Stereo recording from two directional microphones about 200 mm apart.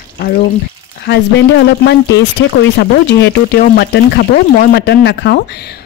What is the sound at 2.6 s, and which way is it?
Speech, 65° left (ahead or behind).